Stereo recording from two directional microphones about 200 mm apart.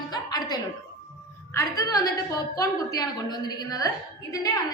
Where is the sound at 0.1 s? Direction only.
20° left (ahead or behind).